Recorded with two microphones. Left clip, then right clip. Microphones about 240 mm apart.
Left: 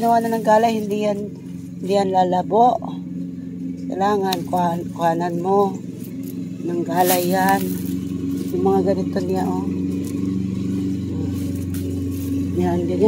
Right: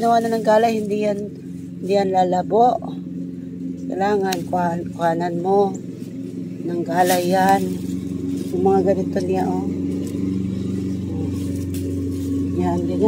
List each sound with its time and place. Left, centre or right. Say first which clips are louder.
0.0 s speech: even; centre
3.9 s speech: even; centre
6.7 s speech: even; centre
8.6 s speech: right 2 dB; centre
12.5 s speech: left 2 dB; centre